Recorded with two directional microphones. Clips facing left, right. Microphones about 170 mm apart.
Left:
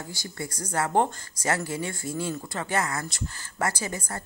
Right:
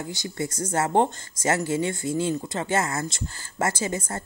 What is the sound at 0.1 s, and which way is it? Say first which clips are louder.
Speech: right 6 dB; 20° right (ahead or behind).